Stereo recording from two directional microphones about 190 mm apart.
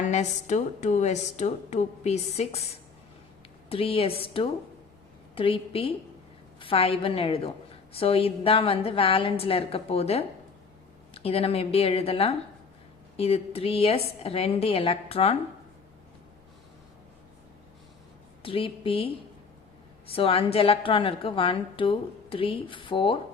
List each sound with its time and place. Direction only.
0.0 s speech: 35° left (ahead or behind)
3.7 s a woman's voice: 30° left (ahead or behind)
18.4 s a woman's voice: 30° left (ahead or behind)